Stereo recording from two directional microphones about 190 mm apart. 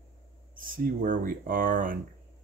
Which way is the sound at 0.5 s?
50° right (ahead or behind).